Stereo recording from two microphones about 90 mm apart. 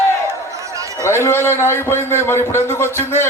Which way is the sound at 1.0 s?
30° left (ahead or behind).